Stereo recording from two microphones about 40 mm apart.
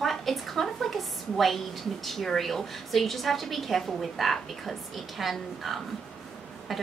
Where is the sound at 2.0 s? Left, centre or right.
Centre.